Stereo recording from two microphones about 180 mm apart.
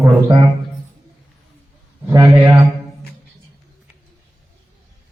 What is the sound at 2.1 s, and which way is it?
Speech, 20° right (ahead or behind).